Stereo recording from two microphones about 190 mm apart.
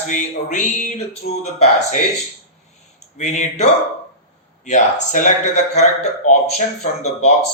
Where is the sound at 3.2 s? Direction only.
40° left (ahead or behind).